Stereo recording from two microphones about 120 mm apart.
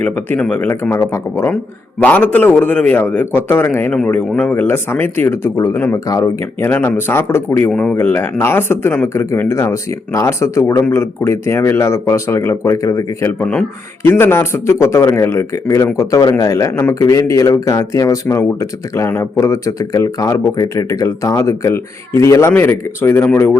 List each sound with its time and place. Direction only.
0.0 s a man's voice: 10° left (ahead or behind); by 6.2 s 30° left (ahead or behind)
6.4 s speech: 15° left (ahead or behind)
7.7 s a man's voice: 5° left (ahead or behind)
7.9 s speech: 15° left (ahead or behind)
13.4 s a man's voice: 10° left (ahead or behind)
14.0 s speech: 20° left (ahead or behind)